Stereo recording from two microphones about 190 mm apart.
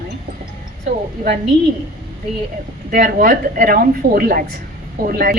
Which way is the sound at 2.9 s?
50° right (ahead or behind).